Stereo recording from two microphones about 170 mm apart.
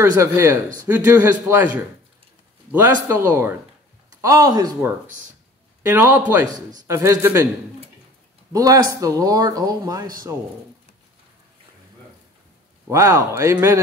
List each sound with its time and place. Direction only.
0.0 s speech: 15° right (ahead or behind)
8.5 s speech: 20° right (ahead or behind)
12.9 s speech: 20° right (ahead or behind)